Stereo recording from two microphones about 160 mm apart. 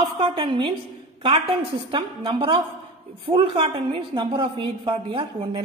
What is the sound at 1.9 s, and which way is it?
A woman's voice, 35° right (ahead or behind).